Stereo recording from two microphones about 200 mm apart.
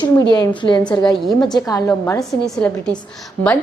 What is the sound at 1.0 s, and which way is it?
Speech, centre (ahead or behind).